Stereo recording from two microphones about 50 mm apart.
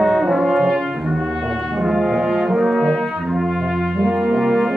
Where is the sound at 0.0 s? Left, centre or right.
Centre.